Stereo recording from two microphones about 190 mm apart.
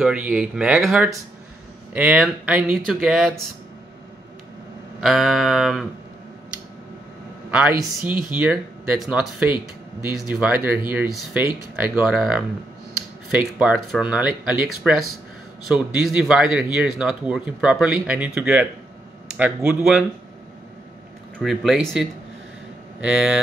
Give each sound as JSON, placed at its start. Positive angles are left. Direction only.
{"t": 0.0, "sound": "speech", "side_deg": -5}
{"t": 5.0, "sound": "speech", "side_deg": 0}
{"t": 7.5, "sound": "speech", "side_deg": -5}
{"t": 8.1, "sound": "speech", "side_deg": 25}
{"t": 8.4, "sound": "speech", "side_deg": -5}
{"t": 21.4, "sound": "speech", "side_deg": 0}